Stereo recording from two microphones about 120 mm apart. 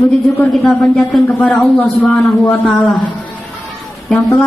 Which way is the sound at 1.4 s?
Centre (ahead or behind).